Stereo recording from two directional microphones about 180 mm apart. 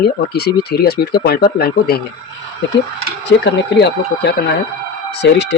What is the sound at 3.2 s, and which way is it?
Speech, 80° left.